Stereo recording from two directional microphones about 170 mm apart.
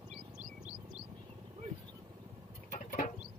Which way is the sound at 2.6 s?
50° left (ahead or behind).